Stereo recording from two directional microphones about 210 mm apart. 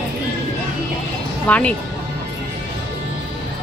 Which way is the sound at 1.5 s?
5° left (ahead or behind).